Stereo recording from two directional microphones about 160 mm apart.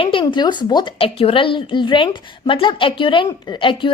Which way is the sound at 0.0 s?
30° left (ahead or behind).